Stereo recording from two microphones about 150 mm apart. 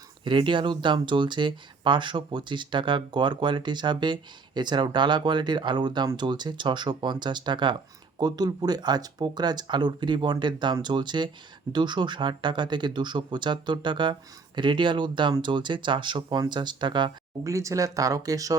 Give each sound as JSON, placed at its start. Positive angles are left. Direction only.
{"t": 0.3, "sound": "speech", "side_deg": -35}